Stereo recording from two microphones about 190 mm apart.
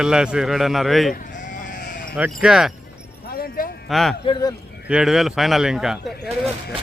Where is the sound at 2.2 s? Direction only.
5° right (ahead or behind).